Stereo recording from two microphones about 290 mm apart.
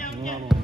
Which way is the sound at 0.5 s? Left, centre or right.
Centre.